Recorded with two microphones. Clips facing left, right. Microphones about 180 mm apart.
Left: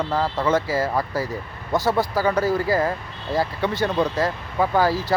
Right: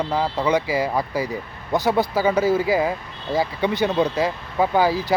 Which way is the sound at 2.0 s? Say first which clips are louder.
Right 2 dB; centre (ahead or behind).